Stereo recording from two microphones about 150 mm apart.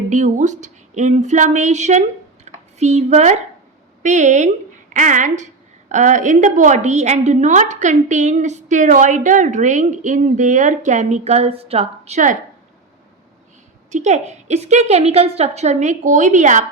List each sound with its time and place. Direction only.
0.1 s a woman's voice: 55° right (ahead or behind)
13.9 s a woman's voice: 50° right (ahead or behind)